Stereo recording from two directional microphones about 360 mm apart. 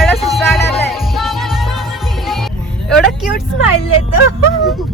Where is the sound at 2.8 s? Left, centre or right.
Centre.